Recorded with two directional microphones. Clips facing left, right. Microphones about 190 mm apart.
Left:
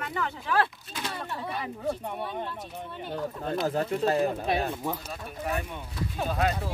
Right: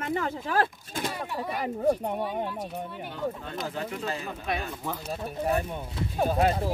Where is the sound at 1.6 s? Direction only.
40° right (ahead or behind).